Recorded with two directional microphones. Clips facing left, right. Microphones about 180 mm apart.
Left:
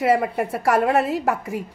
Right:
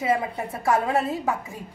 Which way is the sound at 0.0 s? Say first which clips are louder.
Left 5 dB; 75° left (ahead or behind).